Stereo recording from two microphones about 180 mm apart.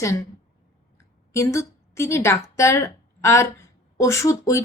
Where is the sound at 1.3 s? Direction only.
15° left (ahead or behind).